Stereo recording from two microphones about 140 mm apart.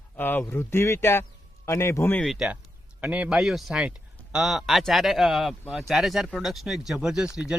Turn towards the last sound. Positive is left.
turn(degrees=-5)  # may be behind; listen again after turning